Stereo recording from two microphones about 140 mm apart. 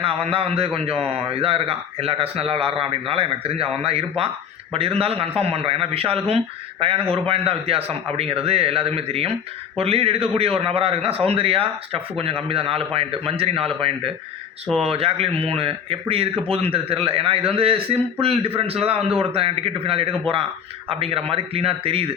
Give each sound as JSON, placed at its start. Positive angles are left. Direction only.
{"t": 0.0, "sound": "a man's voice", "side_deg": -40}